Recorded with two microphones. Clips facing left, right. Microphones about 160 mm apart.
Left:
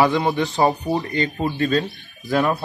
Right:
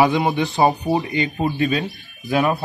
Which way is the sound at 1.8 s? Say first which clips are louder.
Right 1 dB; centre (ahead or behind).